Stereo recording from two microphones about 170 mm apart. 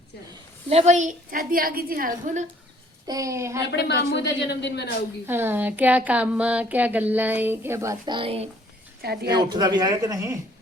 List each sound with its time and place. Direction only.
0.7 s a woman's voice: 40° right (ahead or behind)
3.1 s speech: 20° right (ahead or behind)
3.7 s speech: 90° left
5.2 s speech: 10° right (ahead or behind); by 8.4 s 35° right (ahead or behind)
9.0 s speech: 70° right (ahead or behind)
9.3 s a man's voice: 25° right (ahead or behind)